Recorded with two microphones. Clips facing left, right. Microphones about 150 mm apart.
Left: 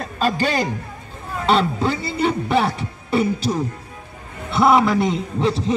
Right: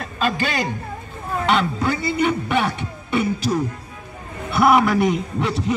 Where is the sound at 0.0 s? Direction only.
35° left (ahead or behind).